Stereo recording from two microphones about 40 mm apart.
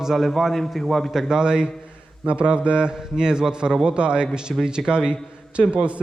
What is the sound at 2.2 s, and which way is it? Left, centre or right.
A man's voice, right.